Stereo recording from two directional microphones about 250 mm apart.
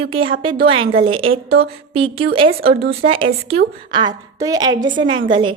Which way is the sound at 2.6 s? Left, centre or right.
Right.